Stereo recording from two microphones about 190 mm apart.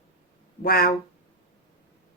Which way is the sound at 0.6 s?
50° left (ahead or behind).